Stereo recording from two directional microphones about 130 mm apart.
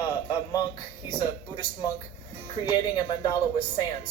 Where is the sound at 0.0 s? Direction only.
35° left (ahead or behind).